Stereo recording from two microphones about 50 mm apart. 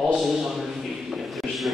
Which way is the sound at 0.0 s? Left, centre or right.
Centre.